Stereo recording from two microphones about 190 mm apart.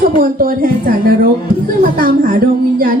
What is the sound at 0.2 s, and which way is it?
A woman's voice, 50° right (ahead or behind).